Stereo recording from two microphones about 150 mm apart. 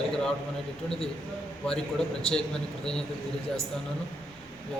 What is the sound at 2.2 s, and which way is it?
Speech, 5° left (ahead or behind).